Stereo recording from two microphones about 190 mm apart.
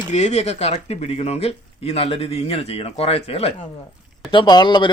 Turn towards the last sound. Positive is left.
turn(degrees=25)  # may be behind; listen again after turning